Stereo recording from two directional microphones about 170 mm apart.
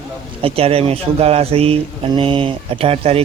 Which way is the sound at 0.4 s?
35° right (ahead or behind).